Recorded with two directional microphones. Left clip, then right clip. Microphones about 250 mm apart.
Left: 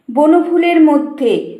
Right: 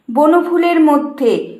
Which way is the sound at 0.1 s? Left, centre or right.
Centre.